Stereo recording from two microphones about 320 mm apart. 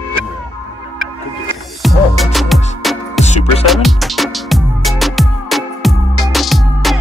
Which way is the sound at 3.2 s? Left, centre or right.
Left.